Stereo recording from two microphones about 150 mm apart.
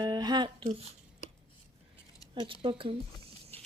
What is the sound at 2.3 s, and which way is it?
Speech, 35° right (ahead or behind).